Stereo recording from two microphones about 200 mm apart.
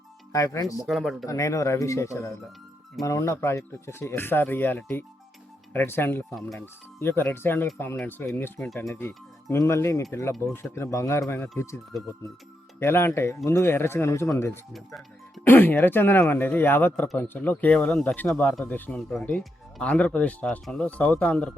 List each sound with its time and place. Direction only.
0.3 s speech: 15° left (ahead or behind)
0.9 s speech: centre (ahead or behind)
1.3 s speech: 15° left (ahead or behind)
6.3 s speech: centre (ahead or behind)
7.0 s speech: 10° left (ahead or behind)
8.9 s speech: 10° left (ahead or behind)
12.8 s speech: 10° left (ahead or behind)